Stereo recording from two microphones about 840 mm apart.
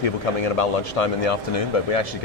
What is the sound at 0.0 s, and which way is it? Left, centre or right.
Speech, left.